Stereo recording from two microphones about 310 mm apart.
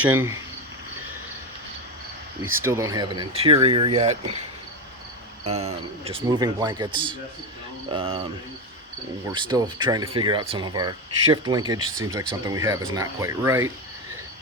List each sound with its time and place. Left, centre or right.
0.0 s speech: centre
2.4 s speech: centre
5.5 s speech: right